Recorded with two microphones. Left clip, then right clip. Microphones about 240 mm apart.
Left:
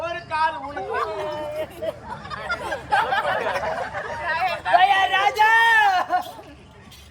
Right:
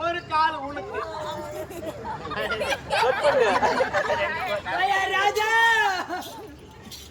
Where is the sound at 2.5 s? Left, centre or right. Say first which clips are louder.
Left 4 dB; left.